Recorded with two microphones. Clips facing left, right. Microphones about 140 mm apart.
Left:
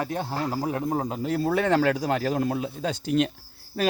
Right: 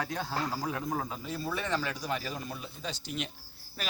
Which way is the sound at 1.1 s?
70° left (ahead or behind).